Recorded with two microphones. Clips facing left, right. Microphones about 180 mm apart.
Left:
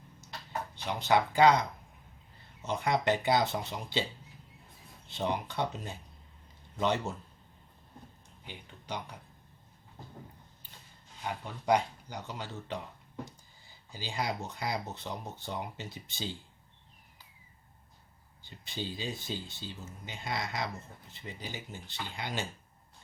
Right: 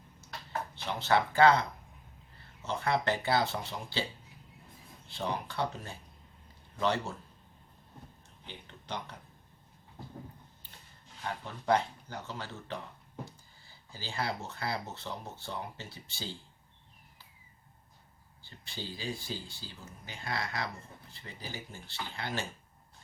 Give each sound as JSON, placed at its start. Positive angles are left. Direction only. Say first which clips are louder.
{"t": 0.9, "sound": "speech", "louder": "left 1 dB", "side_deg": 15}
{"t": 5.0, "sound": "speech", "louder": "left 2 dB", "side_deg": 20}
{"t": 8.4, "sound": "speech", "louder": "left 1 dB", "side_deg": 10}
{"t": 11.2, "sound": "speech", "louder": "left 1 dB", "side_deg": 15}
{"t": 13.9, "sound": "speech", "louder": "left 1 dB", "side_deg": 15}
{"t": 18.4, "sound": "speech", "louder": "left 4 dB", "side_deg": 20}